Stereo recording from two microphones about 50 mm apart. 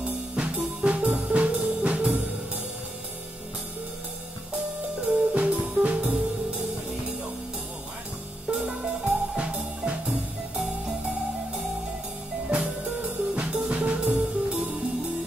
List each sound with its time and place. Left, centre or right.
0.4 s music: centre
5.0 s music: right
8.6 s music: right
12.4 s music: right